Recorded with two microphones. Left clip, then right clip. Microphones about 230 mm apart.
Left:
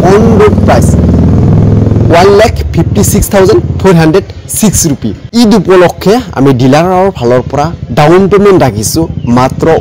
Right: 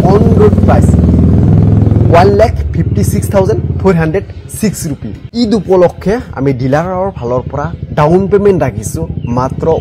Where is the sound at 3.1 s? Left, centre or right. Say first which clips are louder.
Left 6 dB; left.